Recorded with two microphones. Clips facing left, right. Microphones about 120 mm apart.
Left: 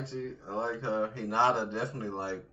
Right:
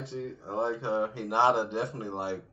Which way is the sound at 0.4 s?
25° right (ahead or behind).